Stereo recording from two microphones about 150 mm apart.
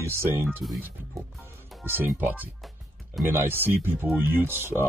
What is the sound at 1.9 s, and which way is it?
Speech, 15° right (ahead or behind).